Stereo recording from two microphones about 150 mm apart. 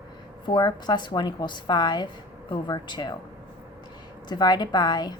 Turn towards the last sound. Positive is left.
turn(degrees=30)  # may be behind; listen again after turning